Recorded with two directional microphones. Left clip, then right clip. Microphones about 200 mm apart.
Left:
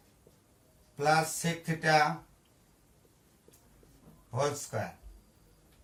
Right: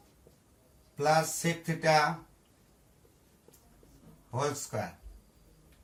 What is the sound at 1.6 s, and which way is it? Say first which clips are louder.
Speech: even; 15° left (ahead or behind).